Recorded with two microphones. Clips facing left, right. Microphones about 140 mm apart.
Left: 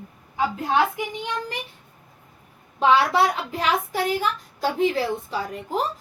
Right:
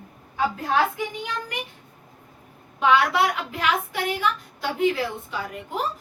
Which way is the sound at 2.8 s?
35° left (ahead or behind).